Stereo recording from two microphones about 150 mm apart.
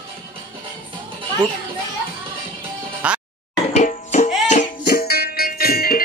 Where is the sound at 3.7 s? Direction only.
50° left (ahead or behind).